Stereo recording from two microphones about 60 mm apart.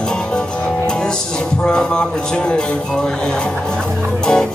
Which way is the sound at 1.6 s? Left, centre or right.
Centre.